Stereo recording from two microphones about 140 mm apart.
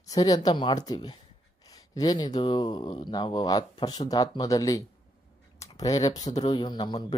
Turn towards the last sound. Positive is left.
turn(degrees=30)  # may be behind; listen again after turning